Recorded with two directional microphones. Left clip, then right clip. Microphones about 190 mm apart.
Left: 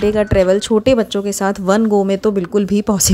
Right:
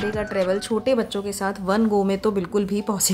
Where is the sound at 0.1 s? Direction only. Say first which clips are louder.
Left 9 dB; 35° left (ahead or behind).